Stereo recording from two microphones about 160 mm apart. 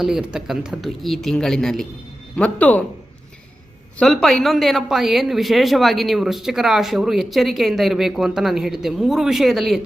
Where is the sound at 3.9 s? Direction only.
Centre (ahead or behind).